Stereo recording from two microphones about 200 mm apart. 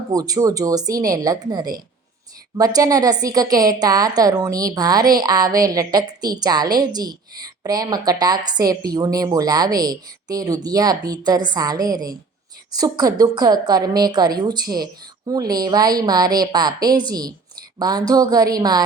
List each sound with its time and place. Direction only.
0.1 s a woman's voice: 20° right (ahead or behind)